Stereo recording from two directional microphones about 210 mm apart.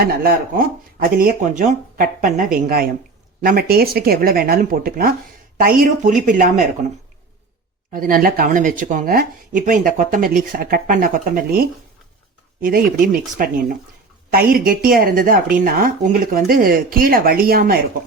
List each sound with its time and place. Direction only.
0.0 s speech: 45° right (ahead or behind)
7.9 s speech: 45° right (ahead or behind)
13.3 s speech: 40° right (ahead or behind)